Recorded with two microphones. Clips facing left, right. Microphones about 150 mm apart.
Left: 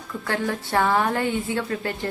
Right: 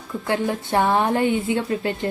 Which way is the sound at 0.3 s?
20° right (ahead or behind).